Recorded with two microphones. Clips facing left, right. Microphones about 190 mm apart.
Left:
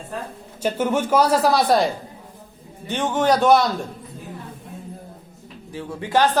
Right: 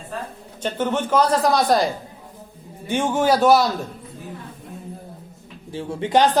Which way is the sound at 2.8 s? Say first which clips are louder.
Right 1 dB; 10° right (ahead or behind).